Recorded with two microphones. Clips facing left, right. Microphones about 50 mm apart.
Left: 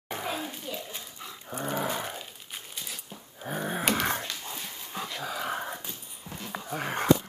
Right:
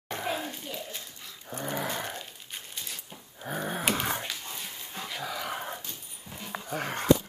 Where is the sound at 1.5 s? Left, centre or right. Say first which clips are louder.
Left 2 dB; centre.